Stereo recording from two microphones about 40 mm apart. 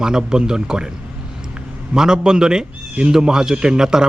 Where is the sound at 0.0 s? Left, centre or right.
Centre.